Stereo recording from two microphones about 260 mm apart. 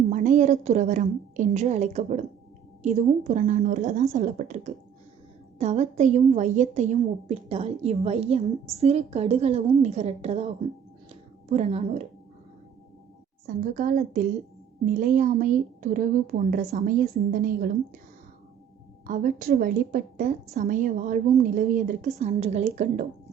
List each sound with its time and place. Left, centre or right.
0.1 s a woman's voice: right
11.1 s a sound: right
13.6 s a woman's voice: right
19.0 s a woman's voice: right